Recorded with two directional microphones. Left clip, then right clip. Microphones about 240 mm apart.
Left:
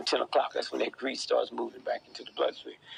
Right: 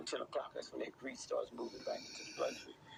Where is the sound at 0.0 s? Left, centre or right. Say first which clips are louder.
Left 14 dB; left.